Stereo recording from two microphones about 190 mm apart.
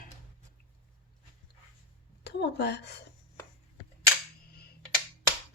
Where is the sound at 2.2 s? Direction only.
60° left (ahead or behind).